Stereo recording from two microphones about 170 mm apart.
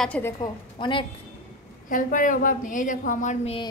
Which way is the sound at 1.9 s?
50° left (ahead or behind).